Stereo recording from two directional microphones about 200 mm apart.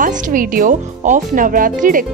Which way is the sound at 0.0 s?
45° right (ahead or behind).